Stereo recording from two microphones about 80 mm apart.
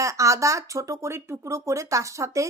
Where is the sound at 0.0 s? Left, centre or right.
Right.